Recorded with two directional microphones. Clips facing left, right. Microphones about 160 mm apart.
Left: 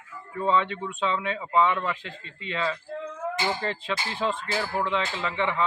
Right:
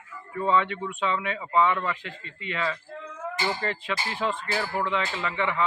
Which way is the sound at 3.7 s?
25° left (ahead or behind).